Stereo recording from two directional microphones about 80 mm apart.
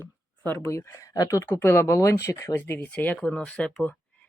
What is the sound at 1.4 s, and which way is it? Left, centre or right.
Speech, left.